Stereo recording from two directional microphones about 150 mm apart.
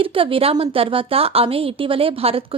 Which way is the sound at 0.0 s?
35° right (ahead or behind).